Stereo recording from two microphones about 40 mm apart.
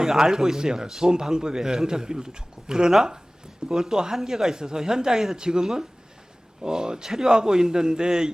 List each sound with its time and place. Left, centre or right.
0.0 s a man's voice: centre